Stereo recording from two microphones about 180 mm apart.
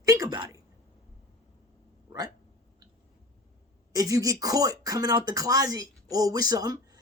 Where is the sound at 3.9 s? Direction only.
20° right (ahead or behind).